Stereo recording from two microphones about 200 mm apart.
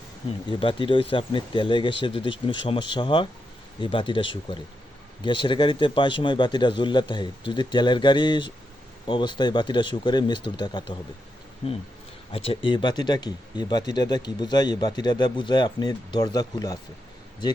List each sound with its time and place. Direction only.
0.6 s speech: 25° left (ahead or behind)
12.5 s speech: 25° left (ahead or behind)